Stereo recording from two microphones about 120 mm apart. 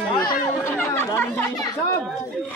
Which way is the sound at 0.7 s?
20° left (ahead or behind).